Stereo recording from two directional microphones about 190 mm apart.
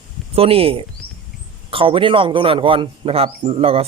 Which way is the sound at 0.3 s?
30° right (ahead or behind).